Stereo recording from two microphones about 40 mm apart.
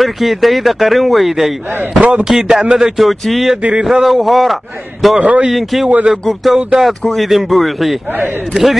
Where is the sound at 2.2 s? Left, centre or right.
Centre.